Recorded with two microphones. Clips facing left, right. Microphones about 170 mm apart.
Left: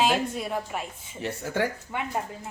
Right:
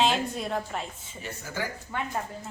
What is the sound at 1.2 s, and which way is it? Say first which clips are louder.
Speech: left 7 dB; 65° left (ahead or behind).